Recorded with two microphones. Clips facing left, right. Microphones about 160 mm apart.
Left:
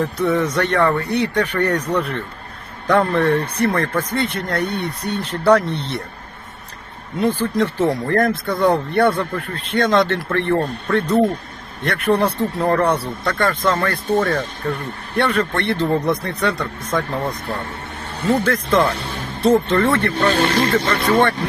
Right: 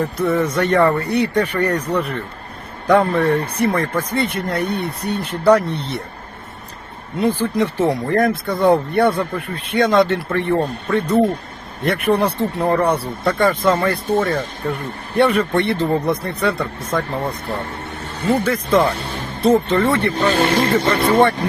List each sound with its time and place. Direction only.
0.0 s speech: centre (ahead or behind)
7.2 s speech: 10° right (ahead or behind)
18.4 s speech: 10° right (ahead or behind)
20.4 s speech: 30° right (ahead or behind)
20.7 s speech: 10° right (ahead or behind)